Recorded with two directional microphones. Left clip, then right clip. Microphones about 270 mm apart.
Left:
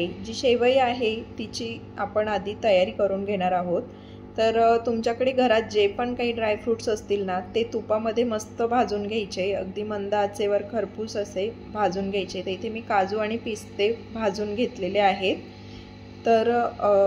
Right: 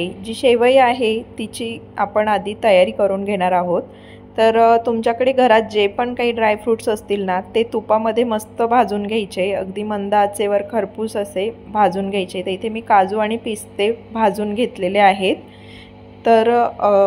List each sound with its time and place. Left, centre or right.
0.0 s a woman's voice: centre